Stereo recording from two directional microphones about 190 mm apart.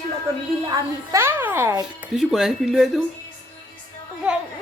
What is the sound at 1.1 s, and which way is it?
Speech, 15° right (ahead or behind).